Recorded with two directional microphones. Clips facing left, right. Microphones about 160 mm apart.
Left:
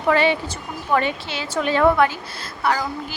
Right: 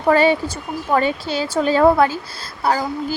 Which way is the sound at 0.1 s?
40° right (ahead or behind).